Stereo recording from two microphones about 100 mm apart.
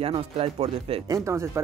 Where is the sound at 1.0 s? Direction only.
35° right (ahead or behind).